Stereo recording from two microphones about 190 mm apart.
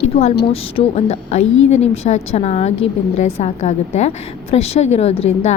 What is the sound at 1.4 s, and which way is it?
Speech, 90° left.